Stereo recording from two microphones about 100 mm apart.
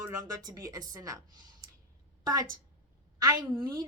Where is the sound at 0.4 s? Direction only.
35° right (ahead or behind).